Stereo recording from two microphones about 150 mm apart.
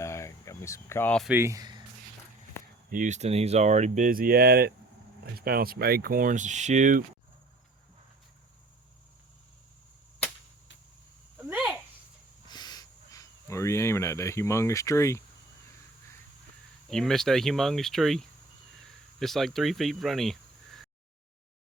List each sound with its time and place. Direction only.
0.0 s cricket: 20° left (ahead or behind)
1.3 s speech: 20° right (ahead or behind)
2.9 s speech: 55° right (ahead or behind)
11.3 s a sound: 15° right (ahead or behind)
12.5 s a sound: 25° left (ahead or behind)
16.9 s speech: 5° left (ahead or behind)